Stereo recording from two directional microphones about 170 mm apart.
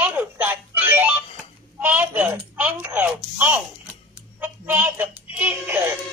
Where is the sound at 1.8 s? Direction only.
10° right (ahead or behind).